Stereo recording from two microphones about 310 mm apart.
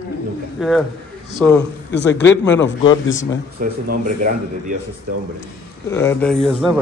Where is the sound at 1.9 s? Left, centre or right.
Left.